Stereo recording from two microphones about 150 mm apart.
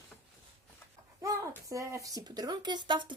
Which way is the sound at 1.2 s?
20° right (ahead or behind).